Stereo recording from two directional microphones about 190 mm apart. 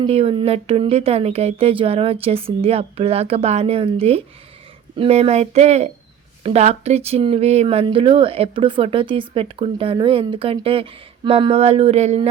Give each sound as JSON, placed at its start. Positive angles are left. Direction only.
{"t": 0.0, "sound": "speech", "side_deg": -30}